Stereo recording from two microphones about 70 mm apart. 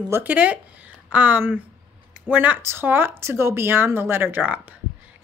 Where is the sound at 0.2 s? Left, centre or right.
Right.